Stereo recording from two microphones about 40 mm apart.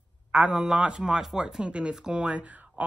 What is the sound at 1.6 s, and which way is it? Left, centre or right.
Speech, right.